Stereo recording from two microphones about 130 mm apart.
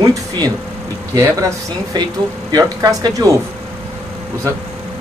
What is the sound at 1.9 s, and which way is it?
Speech, 35° right (ahead or behind).